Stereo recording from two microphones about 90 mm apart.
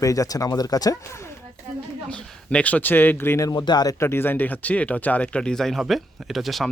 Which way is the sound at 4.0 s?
25° left (ahead or behind).